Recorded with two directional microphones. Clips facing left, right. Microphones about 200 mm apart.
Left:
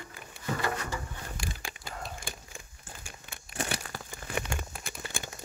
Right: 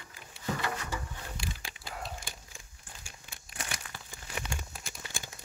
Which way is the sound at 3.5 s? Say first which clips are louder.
Left 8 dB; 40° left (ahead or behind).